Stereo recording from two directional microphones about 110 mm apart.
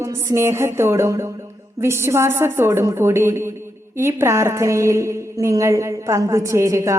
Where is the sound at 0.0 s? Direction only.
25° right (ahead or behind).